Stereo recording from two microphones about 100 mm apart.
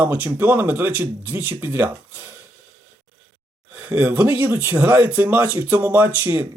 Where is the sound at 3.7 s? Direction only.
15° right (ahead or behind).